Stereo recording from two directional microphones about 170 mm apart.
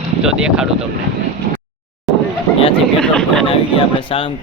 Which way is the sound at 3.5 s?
30° left (ahead or behind).